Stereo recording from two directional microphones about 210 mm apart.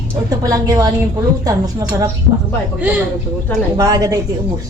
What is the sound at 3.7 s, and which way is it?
Speech, 15° right (ahead or behind).